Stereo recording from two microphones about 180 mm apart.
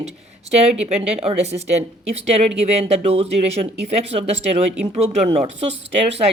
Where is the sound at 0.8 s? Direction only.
35° right (ahead or behind).